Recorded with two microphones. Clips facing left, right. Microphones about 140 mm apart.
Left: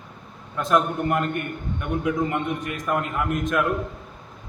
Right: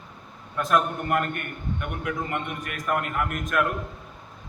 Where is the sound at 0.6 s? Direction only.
20° left (ahead or behind).